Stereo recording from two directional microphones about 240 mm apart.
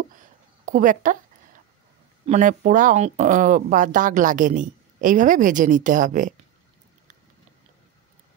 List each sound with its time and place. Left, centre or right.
0.7 s speech: right
2.2 s speech: right